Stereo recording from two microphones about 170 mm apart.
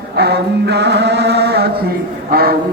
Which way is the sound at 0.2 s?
75° right (ahead or behind).